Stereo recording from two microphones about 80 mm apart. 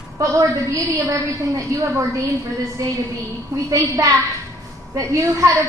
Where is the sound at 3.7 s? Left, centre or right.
Right.